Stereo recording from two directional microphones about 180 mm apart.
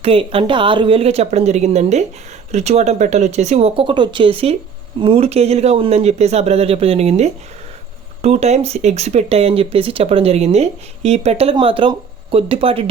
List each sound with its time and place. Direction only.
0.0 s speech: 30° right (ahead or behind)